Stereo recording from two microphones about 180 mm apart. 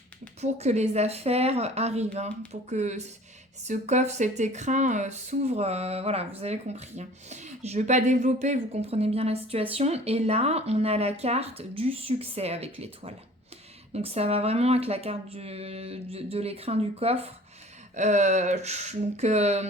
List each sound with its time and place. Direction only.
0.4 s speech: 40° right (ahead or behind)